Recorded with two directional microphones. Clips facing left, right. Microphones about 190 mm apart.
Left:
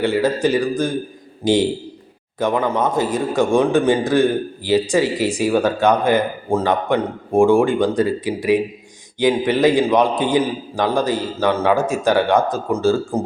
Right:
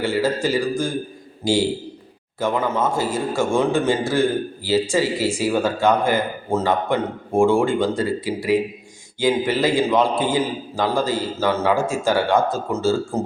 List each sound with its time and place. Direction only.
0.0 s a man's voice: 20° left (ahead or behind)